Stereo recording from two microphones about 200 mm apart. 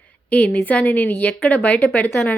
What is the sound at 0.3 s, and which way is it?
A woman's voice, 5° left (ahead or behind).